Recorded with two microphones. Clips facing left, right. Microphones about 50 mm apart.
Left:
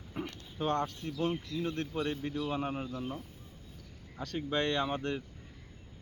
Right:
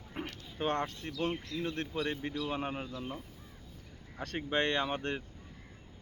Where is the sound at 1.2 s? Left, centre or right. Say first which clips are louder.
Left 1 dB; right.